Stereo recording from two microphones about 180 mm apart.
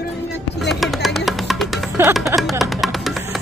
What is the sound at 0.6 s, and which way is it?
Speech, centre (ahead or behind).